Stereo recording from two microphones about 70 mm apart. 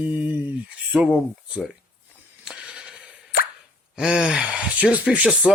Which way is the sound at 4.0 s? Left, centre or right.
Centre.